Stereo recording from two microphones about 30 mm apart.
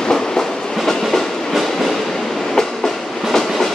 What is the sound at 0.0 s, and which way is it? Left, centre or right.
Train, left.